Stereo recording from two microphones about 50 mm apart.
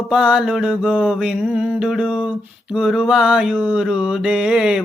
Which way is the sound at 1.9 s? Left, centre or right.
Centre.